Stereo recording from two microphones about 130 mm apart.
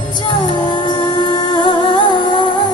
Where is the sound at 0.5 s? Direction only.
35° left (ahead or behind).